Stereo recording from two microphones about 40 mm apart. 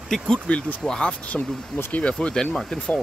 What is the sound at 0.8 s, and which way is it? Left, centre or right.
Speech, left.